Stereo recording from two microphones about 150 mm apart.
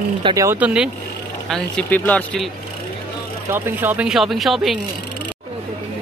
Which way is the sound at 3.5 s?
15° right (ahead or behind).